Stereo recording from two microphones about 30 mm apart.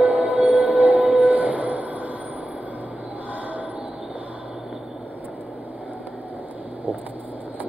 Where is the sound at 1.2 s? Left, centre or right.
Right.